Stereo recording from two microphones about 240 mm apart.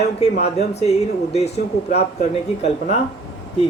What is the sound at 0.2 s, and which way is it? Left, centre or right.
Speech, left.